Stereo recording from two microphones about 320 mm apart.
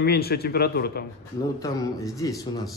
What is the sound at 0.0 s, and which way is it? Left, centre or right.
Speech, left.